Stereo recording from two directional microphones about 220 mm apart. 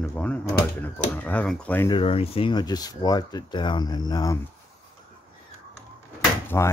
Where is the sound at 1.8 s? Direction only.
25° left (ahead or behind).